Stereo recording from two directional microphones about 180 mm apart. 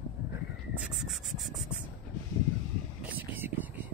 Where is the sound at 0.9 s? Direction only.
Centre (ahead or behind).